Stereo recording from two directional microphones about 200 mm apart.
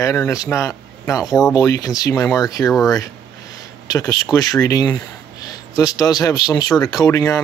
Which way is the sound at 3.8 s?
20° left (ahead or behind).